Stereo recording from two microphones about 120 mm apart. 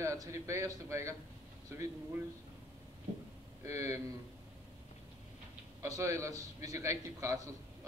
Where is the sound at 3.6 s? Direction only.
25° right (ahead or behind).